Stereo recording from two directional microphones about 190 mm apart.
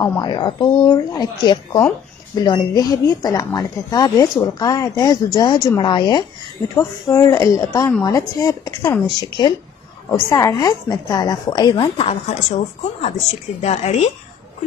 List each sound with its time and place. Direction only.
0.2 s a woman's voice: 25° left (ahead or behind)